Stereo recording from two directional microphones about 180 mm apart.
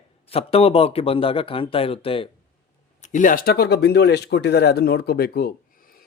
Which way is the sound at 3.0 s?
45° left (ahead or behind).